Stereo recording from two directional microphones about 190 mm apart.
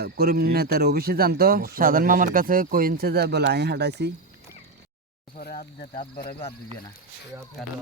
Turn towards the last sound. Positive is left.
turn(degrees=55)  # may be behind; listen again after turning